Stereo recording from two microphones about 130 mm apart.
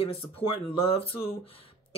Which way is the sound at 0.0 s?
45° left (ahead or behind).